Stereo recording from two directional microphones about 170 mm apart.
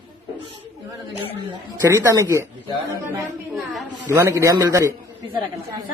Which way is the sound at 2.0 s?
20° right (ahead or behind).